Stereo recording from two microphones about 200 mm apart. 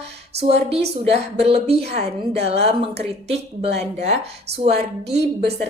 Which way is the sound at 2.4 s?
30° right (ahead or behind).